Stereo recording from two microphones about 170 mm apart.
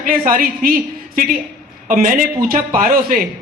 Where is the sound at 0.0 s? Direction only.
55° right (ahead or behind).